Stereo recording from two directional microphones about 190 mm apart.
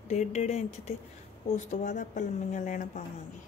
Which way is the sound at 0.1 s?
40° left (ahead or behind).